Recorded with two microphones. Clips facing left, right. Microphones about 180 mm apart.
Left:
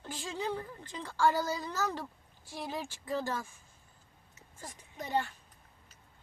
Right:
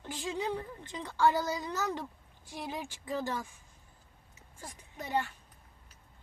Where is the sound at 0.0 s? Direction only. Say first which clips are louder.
Right 2 dB; 15° right (ahead or behind).